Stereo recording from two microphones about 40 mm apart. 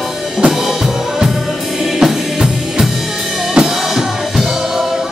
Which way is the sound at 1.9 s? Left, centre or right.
Centre.